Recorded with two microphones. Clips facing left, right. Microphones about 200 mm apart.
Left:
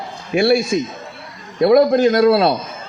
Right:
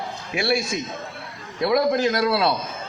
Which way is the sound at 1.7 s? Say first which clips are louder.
Left 8 dB; 50° left (ahead or behind).